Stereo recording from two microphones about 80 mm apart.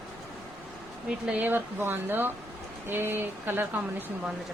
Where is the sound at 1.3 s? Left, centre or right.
Right.